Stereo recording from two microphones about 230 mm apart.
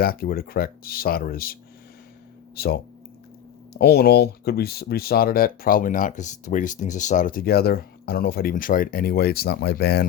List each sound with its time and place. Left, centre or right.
0.0 s speech: left
2.6 s speech: left